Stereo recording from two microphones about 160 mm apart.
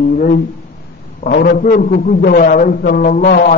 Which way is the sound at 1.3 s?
85° left.